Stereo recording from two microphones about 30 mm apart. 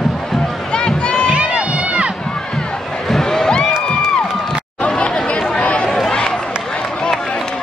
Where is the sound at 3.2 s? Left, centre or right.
Centre.